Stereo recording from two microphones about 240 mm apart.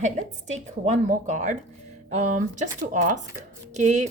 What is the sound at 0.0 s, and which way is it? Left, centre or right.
A woman's voice, right.